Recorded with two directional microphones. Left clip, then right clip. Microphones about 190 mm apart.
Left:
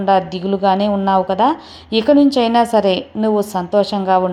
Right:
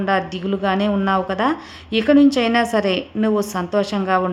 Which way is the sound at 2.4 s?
15° right (ahead or behind).